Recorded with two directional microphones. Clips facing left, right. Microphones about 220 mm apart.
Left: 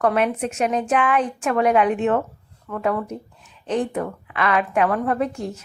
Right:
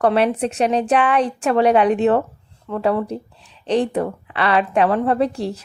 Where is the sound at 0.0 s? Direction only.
30° right (ahead or behind).